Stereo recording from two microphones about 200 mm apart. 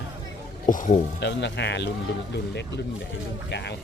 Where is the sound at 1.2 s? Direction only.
60° left (ahead or behind).